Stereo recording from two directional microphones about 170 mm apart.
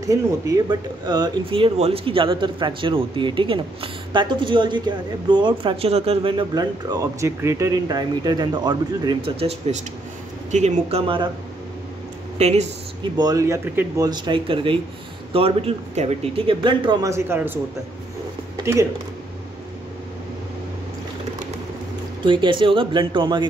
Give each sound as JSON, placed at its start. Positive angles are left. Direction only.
{"t": 0.0, "sound": "speech", "side_deg": -20}
{"t": 12.4, "sound": "speech", "side_deg": -40}
{"t": 13.1, "sound": "speech", "side_deg": -20}
{"t": 18.7, "sound": "speech", "side_deg": -20}
{"t": 22.2, "sound": "speech", "side_deg": -30}